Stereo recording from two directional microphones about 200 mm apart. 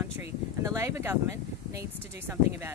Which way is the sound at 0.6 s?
15° right (ahead or behind).